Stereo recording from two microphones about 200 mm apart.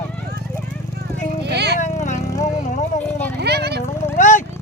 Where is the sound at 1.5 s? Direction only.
55° right (ahead or behind).